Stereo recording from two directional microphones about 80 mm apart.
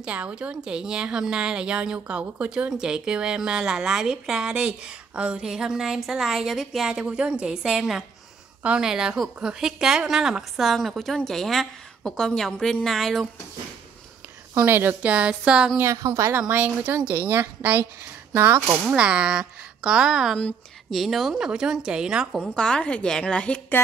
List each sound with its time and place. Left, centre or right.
0.0 s a woman's voice: centre
14.5 s a woman's voice: right; by 15.8 s centre
15.8 s a woman's voice: right
16.4 s a woman's voice: right
18.9 s speech: centre
22.6 s a woman's voice: centre